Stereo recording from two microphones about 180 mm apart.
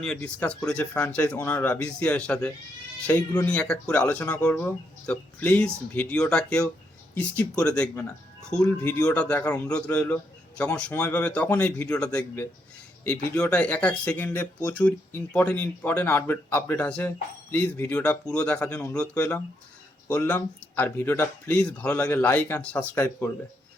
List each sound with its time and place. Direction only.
0.0 s speech: 5° left (ahead or behind)
8.6 s speech: 15° left (ahead or behind)